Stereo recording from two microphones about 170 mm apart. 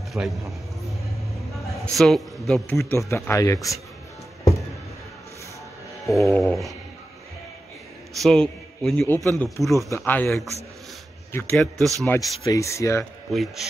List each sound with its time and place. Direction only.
0.1 s a man's voice: centre (ahead or behind)
2.0 s a man's voice: centre (ahead or behind)
2.7 s speech: 15° left (ahead or behind)
6.0 s a man's voice: centre (ahead or behind)
8.2 s a man's voice: 5° left (ahead or behind)
9.8 s speech: 15° left (ahead or behind)
11.5 s a man's voice: centre (ahead or behind)
12.1 s speech: 20° left (ahead or behind)
13.3 s a man's voice: centre (ahead or behind)